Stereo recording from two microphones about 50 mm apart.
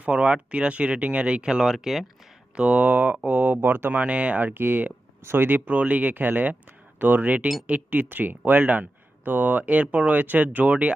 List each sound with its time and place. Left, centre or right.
0.0 s speech: right; by 2.0 s centre
2.5 s speech: right
2.8 s speech: right
3.6 s speech: right
3.9 s speech: right
5.2 s speech: right
5.5 s speech: right